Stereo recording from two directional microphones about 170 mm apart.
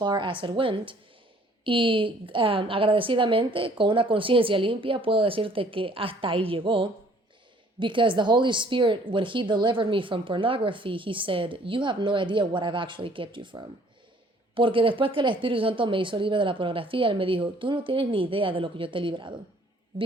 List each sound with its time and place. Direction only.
0.0 s a woman's voice: 25° right (ahead or behind)